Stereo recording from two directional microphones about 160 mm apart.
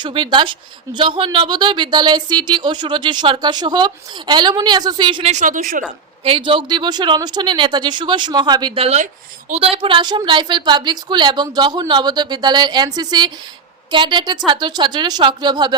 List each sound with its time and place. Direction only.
0.0 s speech: 30° right (ahead or behind)
5.3 s a woman's voice: 50° right (ahead or behind)
6.2 s speech: 35° right (ahead or behind)